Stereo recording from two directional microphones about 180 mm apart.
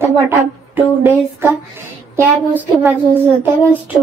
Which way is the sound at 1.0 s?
10° right (ahead or behind).